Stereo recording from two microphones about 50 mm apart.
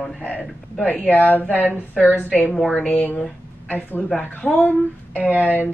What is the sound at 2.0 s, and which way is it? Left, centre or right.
Speech, left.